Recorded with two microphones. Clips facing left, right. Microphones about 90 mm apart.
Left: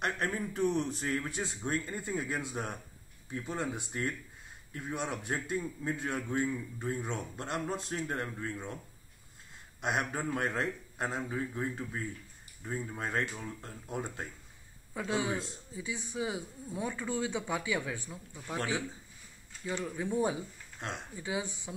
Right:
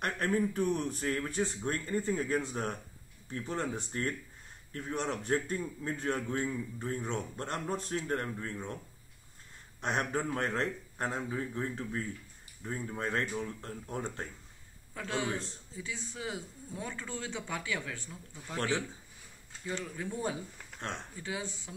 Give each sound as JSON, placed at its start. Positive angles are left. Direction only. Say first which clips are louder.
{"t": 0.0, "sound": "speech", "louder": "right 3 dB", "side_deg": 20}
{"t": 9.8, "sound": "speech", "louder": "right 1 dB", "side_deg": 15}